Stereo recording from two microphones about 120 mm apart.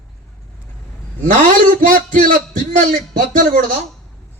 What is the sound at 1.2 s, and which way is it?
A man's voice, 90° right.